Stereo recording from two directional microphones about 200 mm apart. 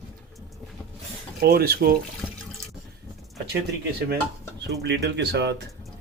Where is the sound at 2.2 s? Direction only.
10° left (ahead or behind).